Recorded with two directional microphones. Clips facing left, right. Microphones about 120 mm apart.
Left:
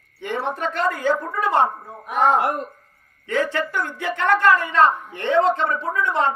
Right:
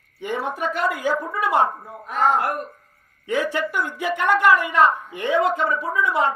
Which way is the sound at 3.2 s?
15° right (ahead or behind).